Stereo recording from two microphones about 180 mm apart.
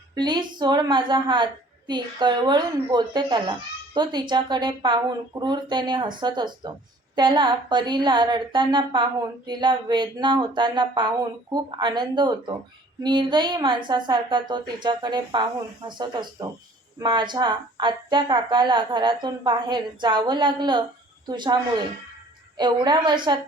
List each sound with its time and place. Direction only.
0.1 s speech: 25° right (ahead or behind)